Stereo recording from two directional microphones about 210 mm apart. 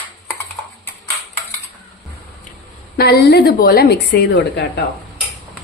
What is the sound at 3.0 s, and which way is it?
A woman's voice, 50° left (ahead or behind).